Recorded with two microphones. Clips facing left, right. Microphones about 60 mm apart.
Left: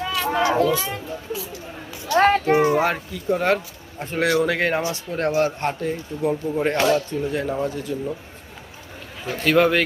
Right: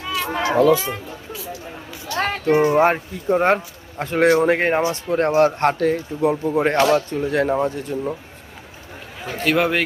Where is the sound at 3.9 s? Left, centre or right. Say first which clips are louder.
Right 6 dB; right.